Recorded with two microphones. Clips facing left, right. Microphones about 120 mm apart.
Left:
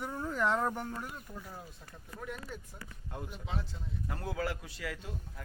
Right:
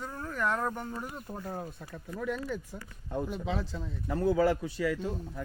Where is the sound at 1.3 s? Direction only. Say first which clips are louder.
Right 8 dB; 55° right (ahead or behind); by 3.6 s 90° right.